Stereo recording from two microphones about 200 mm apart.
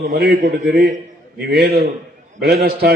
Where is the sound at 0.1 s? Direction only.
50° right (ahead or behind).